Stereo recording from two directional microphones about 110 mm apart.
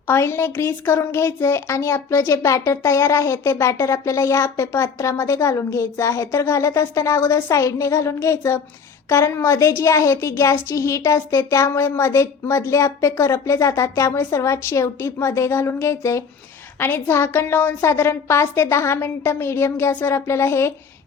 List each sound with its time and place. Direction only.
0.1 s a woman's voice: 25° left (ahead or behind)